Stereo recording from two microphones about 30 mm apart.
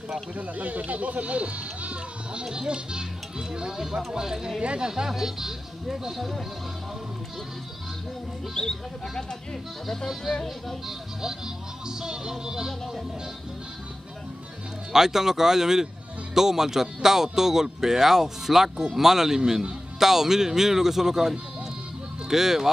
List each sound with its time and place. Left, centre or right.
0.4 s speech: right
2.4 s a child's voice: right
5.1 s speech: centre
6.1 s music: centre
8.5 s speech: left
9.8 s music: centre
10.9 s a child's voice: centre
14.9 s speech: centre